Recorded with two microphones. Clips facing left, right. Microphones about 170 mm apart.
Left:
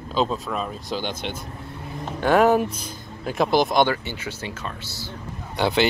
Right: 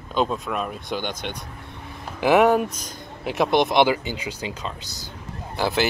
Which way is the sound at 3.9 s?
15° right (ahead or behind).